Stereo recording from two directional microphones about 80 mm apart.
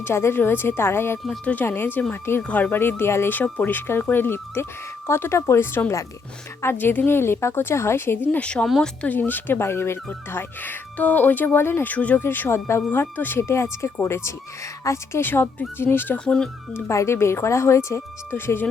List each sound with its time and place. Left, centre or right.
0.0 s speech: left; by 8.6 s centre
8.6 s speech: centre
9.0 s speech: left
16.1 s speech: centre
16.7 s speech: left